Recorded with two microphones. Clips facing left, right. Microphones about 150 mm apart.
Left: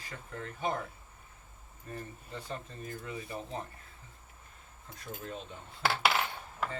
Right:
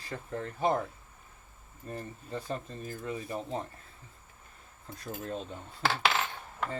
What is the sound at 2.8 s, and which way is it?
Speech, 35° right (ahead or behind).